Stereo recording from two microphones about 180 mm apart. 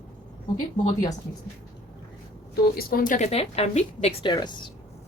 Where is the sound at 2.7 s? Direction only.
50° left (ahead or behind); by 4.5 s 25° left (ahead or behind).